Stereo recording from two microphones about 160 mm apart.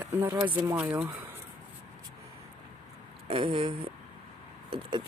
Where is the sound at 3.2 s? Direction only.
35° right (ahead or behind).